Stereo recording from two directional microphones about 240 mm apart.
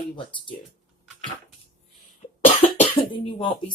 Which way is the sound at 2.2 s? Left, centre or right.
Left.